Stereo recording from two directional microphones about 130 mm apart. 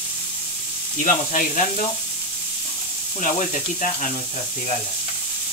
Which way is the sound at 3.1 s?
70° left (ahead or behind).